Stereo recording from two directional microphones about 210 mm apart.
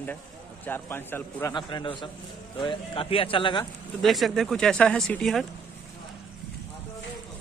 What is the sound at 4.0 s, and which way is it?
Speech, centre (ahead or behind).